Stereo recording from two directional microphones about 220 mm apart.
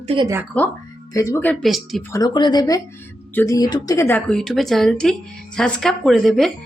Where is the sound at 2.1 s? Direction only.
15° left (ahead or behind).